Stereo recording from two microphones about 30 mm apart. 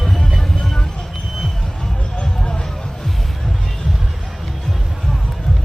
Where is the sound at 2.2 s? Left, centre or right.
Left.